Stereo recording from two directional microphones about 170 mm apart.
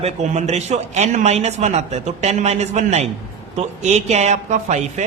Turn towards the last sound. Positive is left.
turn(degrees=-45)  # may be behind; listen again after turning